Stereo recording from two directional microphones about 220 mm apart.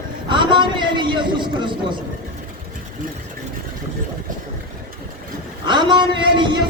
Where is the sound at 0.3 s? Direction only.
20° right (ahead or behind).